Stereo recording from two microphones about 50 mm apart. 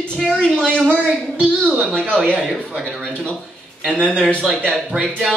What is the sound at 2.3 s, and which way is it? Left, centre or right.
Speech, centre.